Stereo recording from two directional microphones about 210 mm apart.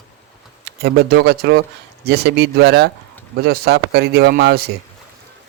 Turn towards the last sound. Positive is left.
turn(degrees=-50)  # may be behind; listen again after turning